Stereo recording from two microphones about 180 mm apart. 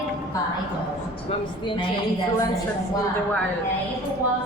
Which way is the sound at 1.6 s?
25° left (ahead or behind).